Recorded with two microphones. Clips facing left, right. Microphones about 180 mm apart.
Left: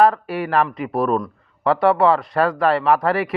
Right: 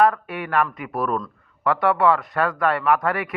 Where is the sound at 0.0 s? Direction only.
30° left (ahead or behind).